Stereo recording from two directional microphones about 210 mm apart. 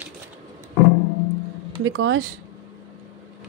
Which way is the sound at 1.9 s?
60° right (ahead or behind).